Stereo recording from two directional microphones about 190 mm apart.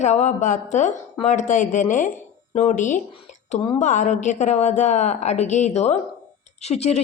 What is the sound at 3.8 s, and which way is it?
A woman's voice, 40° left (ahead or behind).